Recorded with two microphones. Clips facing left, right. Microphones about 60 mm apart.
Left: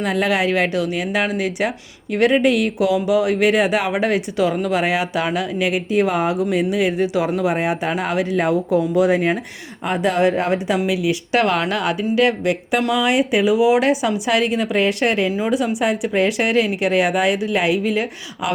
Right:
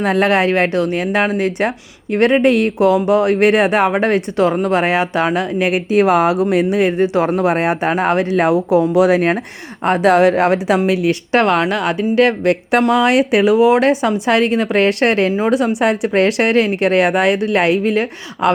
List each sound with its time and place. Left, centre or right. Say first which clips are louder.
0.0 s speech: right 5 dB; right
7.9 s speech: right 5 dB; right
8.3 s a woman's voice: right 4 dB; right
8.9 s speech: right 4 dB; right
10.8 s speech: right 4 dB; right
11.3 s speech: right 4 dB; right
12.9 s speech: right 4 dB; right